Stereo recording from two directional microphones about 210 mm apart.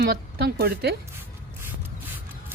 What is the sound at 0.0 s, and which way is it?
Speech, 50° right (ahead or behind).